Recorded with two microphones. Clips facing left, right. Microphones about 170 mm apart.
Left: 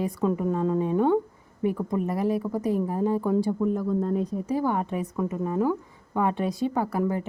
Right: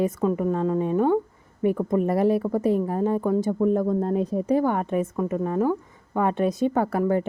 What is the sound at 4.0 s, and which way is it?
A woman's voice, 60° right (ahead or behind).